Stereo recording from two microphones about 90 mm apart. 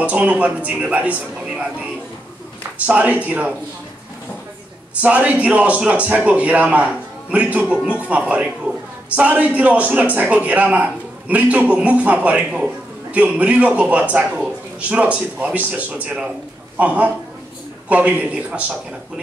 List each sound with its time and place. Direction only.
0.0 s a man's voice: 15° right (ahead or behind)
2.9 s a man's voice: 15° right (ahead or behind)
5.0 s a man's voice: 15° right (ahead or behind)